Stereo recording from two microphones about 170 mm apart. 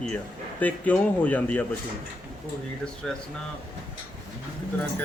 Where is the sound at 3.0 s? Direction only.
5° left (ahead or behind).